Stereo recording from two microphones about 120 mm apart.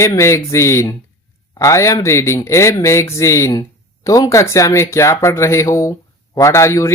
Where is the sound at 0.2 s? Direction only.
25° left (ahead or behind).